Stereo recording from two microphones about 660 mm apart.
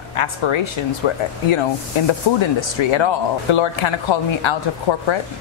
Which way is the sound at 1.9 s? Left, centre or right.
Left.